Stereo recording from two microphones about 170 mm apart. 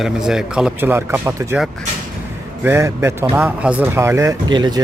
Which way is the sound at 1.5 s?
Centre (ahead or behind).